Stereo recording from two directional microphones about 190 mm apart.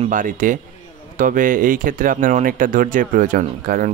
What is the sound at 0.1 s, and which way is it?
Speech, 45° right (ahead or behind).